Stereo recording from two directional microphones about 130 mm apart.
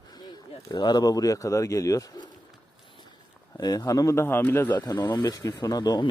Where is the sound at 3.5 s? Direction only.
30° left (ahead or behind).